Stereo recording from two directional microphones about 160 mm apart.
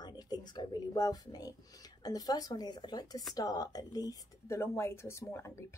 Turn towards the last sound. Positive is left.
turn(degrees=15)  # may be behind; listen again after turning